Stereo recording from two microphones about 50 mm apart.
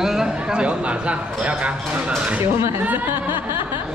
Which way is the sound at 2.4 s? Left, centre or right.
Right.